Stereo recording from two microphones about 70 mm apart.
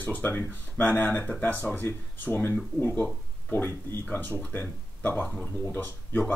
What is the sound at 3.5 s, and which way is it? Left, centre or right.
Speech, left.